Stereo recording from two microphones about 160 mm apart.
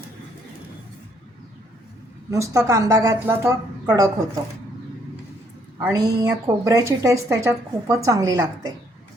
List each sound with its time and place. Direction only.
2.3 s a woman's voice: 20° right (ahead or behind)
5.9 s a woman's voice: 20° right (ahead or behind)